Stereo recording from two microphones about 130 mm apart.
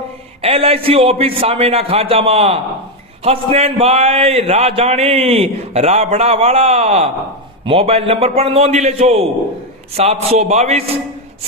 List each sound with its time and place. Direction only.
0.4 s a man's voice: 45° right (ahead or behind)